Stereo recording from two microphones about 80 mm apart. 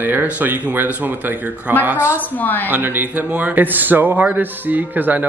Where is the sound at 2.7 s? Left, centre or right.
Right.